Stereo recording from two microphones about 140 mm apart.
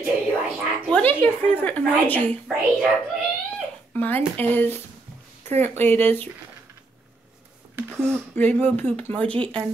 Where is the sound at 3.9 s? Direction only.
10° left (ahead or behind).